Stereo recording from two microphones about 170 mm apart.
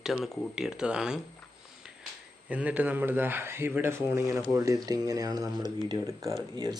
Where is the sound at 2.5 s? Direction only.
10° right (ahead or behind); by 6.8 s 25° right (ahead or behind).